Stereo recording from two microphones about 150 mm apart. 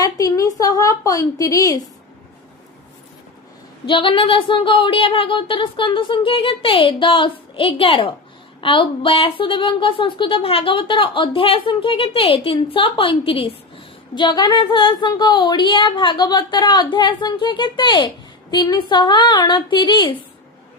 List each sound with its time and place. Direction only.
0.0 s a woman's voice: 20° left (ahead or behind)
3.8 s a woman's voice: 35° left (ahead or behind)